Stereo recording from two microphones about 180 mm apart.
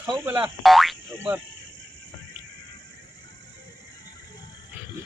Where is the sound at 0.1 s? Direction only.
5° right (ahead or behind).